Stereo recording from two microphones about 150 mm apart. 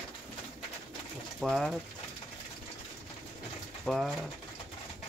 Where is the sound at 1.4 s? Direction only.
Centre (ahead or behind).